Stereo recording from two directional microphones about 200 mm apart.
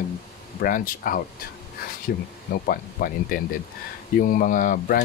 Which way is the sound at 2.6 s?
45° left (ahead or behind).